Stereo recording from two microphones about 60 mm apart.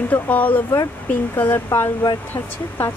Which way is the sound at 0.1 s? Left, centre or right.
Left.